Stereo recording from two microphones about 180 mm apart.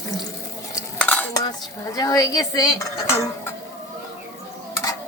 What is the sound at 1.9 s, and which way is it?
Dishes, 20° left (ahead or behind).